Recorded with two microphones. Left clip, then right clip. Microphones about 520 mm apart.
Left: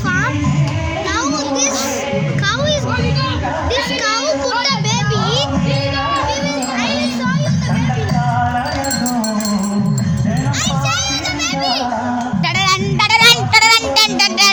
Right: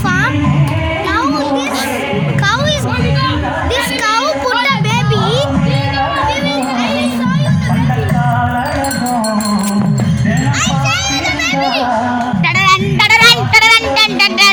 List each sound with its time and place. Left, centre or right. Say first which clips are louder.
13.0 s music: right 2 dB; left